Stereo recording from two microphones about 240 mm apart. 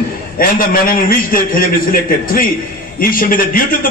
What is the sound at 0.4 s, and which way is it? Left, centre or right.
A man's voice, left.